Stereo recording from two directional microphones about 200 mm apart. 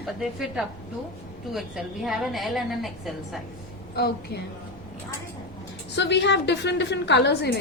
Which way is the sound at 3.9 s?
50° left (ahead or behind).